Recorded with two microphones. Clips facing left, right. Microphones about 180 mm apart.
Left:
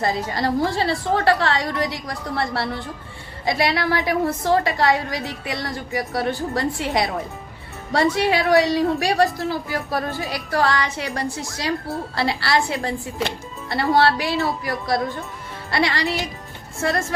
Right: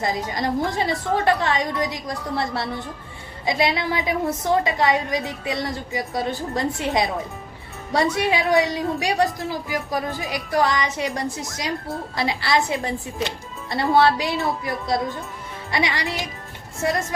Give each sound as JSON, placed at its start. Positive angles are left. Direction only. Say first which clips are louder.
{"t": 0.0, "sound": "a woman's voice", "louder": "left 2 dB", "side_deg": -20}